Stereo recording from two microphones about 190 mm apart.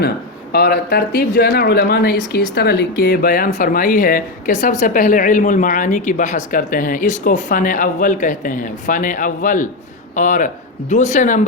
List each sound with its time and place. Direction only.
0.5 s speech: 55° left (ahead or behind)